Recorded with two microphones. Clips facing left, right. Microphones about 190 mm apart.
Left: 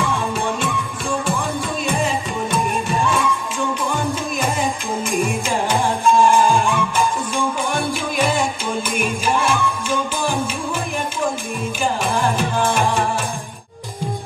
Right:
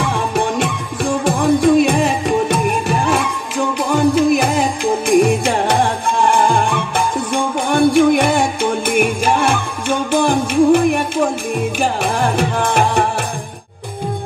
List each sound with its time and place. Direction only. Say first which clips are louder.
0.1 s music: right 4 dB; 60° right (ahead or behind)